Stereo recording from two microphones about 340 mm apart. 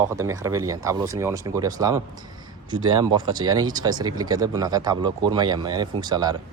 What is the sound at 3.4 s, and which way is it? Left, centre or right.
Speech, centre.